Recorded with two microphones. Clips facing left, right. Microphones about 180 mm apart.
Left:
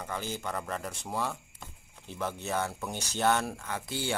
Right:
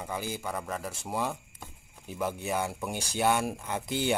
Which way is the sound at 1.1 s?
15° right (ahead or behind).